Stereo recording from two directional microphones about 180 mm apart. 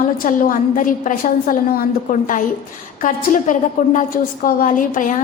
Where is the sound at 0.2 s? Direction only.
50° left (ahead or behind).